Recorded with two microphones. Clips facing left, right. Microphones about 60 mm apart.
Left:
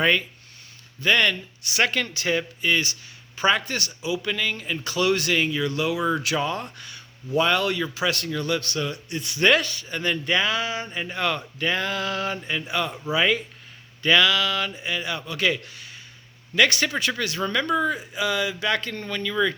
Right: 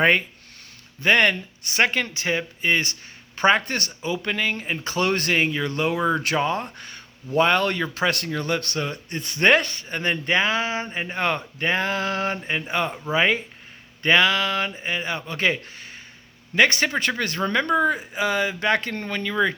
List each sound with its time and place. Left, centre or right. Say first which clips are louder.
0.0 s speech: right 3 dB; right
1.9 s speech: even; right
2.6 s speech: right 1 dB; right